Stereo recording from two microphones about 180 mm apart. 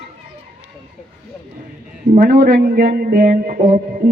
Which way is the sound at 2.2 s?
50° right (ahead or behind).